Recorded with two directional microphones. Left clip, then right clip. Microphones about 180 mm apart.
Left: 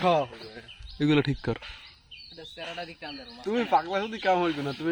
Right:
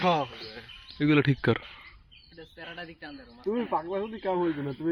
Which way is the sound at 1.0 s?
25° left (ahead or behind).